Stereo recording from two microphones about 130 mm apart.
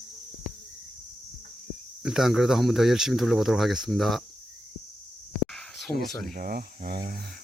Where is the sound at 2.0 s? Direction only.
5° right (ahead or behind).